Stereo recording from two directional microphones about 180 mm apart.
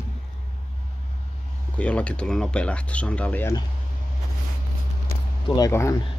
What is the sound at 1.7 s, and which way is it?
Speech, 5° left (ahead or behind).